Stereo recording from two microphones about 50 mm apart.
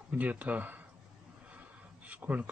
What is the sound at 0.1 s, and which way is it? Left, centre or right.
Speech, right.